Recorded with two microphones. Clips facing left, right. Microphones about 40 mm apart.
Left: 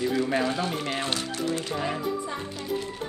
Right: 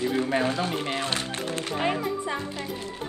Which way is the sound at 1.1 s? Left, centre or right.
Right.